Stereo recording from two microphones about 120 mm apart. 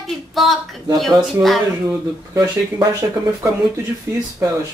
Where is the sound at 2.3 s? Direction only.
35° right (ahead or behind).